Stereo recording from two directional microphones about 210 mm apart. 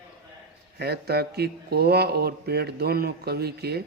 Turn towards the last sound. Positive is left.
turn(degrees=-50)  # may be behind; listen again after turning